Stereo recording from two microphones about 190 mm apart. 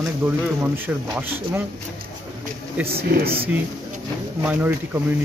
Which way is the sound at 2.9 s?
55° right (ahead or behind).